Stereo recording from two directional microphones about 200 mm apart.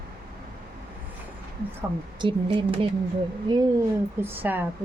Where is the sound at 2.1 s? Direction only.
25° right (ahead or behind).